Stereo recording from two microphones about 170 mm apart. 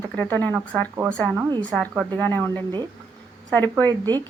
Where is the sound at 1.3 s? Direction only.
25° right (ahead or behind).